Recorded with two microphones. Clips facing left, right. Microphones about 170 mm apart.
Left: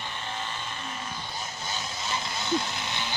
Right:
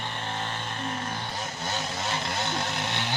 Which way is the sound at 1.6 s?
65° right (ahead or behind).